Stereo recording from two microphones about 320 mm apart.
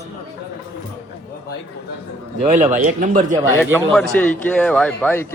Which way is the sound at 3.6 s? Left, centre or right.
Centre.